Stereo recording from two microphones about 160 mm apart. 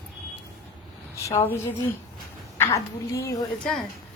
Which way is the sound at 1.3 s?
15° left (ahead or behind).